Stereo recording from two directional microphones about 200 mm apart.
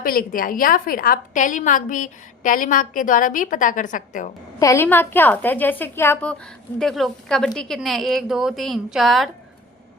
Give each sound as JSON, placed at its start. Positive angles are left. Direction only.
{"t": 0.0, "sound": "a woman's voice", "side_deg": 45}
{"t": 4.6, "sound": "a woman's voice", "side_deg": 15}